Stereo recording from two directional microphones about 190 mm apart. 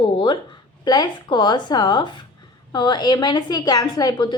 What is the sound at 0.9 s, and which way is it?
A woman's voice, 20° left (ahead or behind).